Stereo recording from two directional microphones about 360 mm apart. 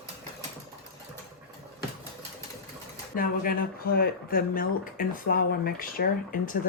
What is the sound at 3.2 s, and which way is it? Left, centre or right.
Speech, left.